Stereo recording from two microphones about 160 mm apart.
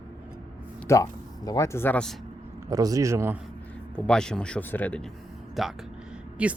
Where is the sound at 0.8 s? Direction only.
20° left (ahead or behind).